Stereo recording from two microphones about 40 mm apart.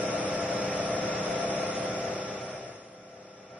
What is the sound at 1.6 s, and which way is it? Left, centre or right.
Vehicle, right.